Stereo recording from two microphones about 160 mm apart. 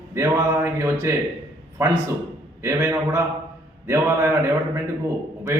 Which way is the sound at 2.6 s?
15° right (ahead or behind).